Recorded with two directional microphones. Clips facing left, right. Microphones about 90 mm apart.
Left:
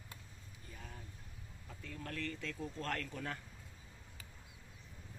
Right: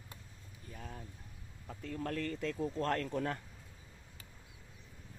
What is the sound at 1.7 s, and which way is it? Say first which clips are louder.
Speech: right 8 dB; 35° right (ahead or behind).